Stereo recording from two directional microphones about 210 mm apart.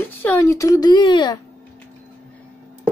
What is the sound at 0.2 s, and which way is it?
Speech, 10° left (ahead or behind).